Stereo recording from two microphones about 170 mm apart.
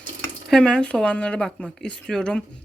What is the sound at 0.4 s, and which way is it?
Speech, 5° left (ahead or behind).